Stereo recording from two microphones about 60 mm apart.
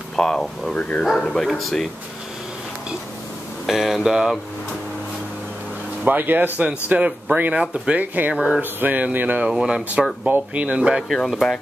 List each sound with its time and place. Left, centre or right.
0.1 s speech: centre
0.7 s speech: left
1.0 s speech: centre
3.6 s speech: centre
6.0 s speech: right
6.6 s a sound: right
9.5 s speech: centre
10.5 s speech: centre
11.2 s speech: centre